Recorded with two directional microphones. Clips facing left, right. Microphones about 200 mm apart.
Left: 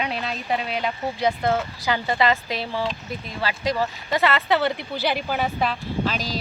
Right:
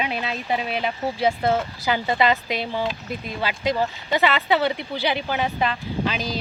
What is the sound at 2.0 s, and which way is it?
Speech, 20° right (ahead or behind).